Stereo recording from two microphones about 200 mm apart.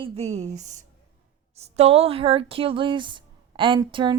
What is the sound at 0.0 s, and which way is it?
Speech, 35° right (ahead or behind).